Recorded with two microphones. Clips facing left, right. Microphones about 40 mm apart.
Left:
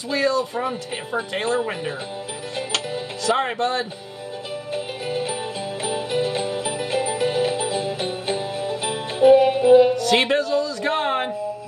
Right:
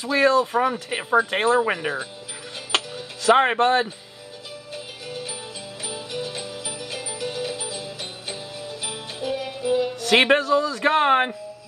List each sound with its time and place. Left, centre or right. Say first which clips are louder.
0.1 s speech: right 3 dB; right
3.3 s speech: right 5 dB; right
4.7 s music: left 8 dB; left
10.0 s speech: right 1 dB; right